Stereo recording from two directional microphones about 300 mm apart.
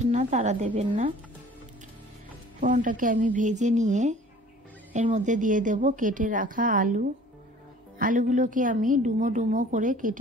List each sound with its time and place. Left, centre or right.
0.0 s a woman's voice: right
2.6 s a woman's voice: right